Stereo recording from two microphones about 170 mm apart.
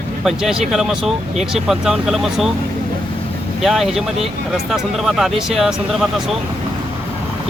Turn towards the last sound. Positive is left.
turn(degrees=0)  # may be behind; listen again after turning